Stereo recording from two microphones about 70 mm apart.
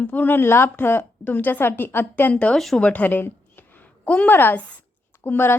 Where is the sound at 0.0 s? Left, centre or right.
Left.